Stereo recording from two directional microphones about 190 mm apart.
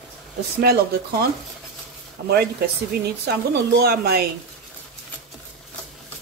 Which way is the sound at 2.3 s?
55° right (ahead or behind).